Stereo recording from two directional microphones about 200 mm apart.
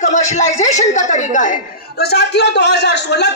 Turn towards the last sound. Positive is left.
turn(degrees=60)  # may be behind; listen again after turning